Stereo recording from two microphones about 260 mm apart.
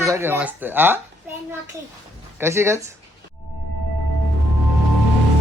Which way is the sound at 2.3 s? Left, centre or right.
Centre.